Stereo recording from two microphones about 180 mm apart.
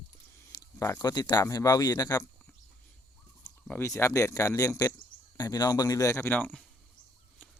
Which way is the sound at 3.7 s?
15° left (ahead or behind).